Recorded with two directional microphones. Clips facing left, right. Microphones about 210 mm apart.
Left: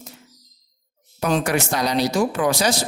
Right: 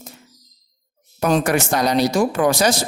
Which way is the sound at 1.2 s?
50° right (ahead or behind).